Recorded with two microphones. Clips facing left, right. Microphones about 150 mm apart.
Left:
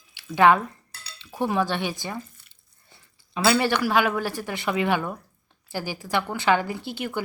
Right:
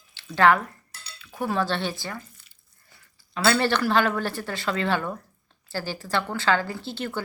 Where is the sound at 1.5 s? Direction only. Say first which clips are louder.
Right 1 dB; 15° left (ahead or behind).